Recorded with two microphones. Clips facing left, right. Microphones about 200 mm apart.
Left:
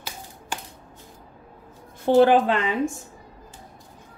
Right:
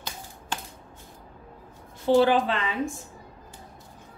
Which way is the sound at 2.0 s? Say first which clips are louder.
Left 4 dB; 55° left (ahead or behind).